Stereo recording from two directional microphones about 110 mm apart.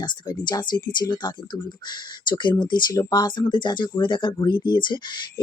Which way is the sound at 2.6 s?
40° left (ahead or behind).